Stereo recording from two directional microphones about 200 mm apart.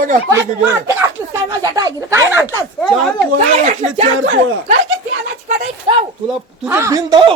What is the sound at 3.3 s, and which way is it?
Speech, 35° right (ahead or behind).